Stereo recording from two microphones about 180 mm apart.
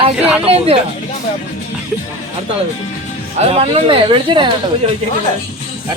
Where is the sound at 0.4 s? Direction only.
35° right (ahead or behind).